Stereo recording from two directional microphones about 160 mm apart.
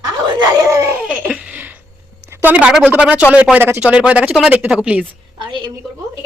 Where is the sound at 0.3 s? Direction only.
20° right (ahead or behind).